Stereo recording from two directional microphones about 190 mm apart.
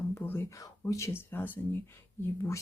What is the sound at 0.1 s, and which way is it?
Speech, 10° left (ahead or behind).